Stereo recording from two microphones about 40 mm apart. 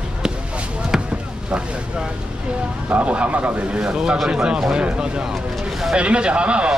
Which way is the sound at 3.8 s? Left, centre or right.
Right.